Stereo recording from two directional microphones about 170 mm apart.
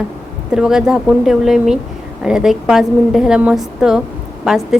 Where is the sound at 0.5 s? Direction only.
5° right (ahead or behind).